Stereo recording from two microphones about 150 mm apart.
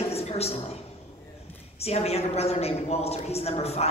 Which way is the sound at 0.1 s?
45° left (ahead or behind).